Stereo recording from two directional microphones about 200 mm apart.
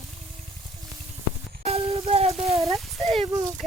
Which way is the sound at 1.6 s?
30° right (ahead or behind).